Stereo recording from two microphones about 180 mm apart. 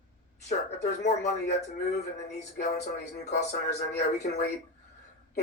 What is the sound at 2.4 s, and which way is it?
Speech, 40° left (ahead or behind).